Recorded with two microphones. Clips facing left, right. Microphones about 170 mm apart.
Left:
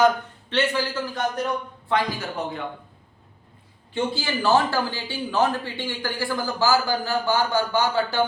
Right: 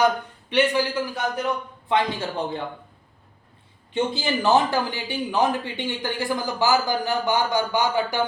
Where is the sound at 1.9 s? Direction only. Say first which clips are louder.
Right 1 dB; 25° right (ahead or behind).